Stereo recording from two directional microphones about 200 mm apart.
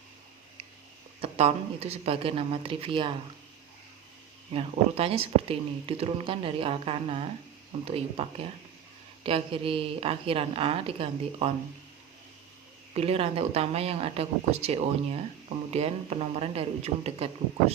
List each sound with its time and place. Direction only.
1.2 s speech: 30° right (ahead or behind)
4.5 s speech: 30° right (ahead or behind)
12.9 s speech: 30° right (ahead or behind)